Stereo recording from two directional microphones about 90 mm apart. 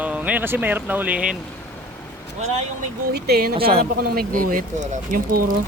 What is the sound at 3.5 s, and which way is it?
Speech, 90° right.